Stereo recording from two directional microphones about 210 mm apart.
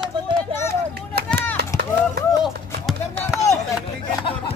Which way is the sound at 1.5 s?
45° right (ahead or behind).